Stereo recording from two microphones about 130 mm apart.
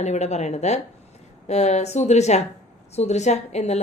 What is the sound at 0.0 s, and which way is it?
A woman's voice, 60° left (ahead or behind).